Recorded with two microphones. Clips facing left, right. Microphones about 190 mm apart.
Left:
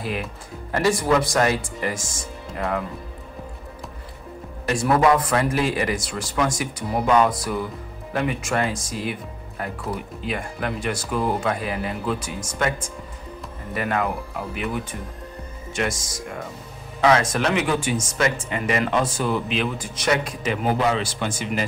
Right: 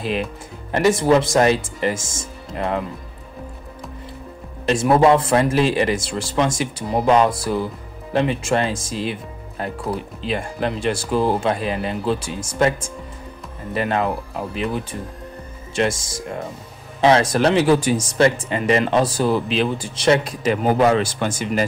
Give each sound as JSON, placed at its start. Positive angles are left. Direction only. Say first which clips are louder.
{"t": 0.0, "sound": "speech", "louder": "right 5 dB", "side_deg": -20}
{"t": 4.6, "sound": "speech", "louder": "right 4 dB", "side_deg": -25}
{"t": 13.7, "sound": "speech", "louder": "right 3 dB", "side_deg": -25}